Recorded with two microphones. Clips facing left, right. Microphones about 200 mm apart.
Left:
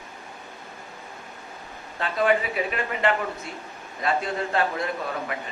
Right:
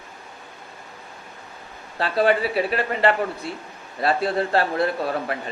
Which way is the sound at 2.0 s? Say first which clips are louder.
Right 3 dB; 35° right (ahead or behind).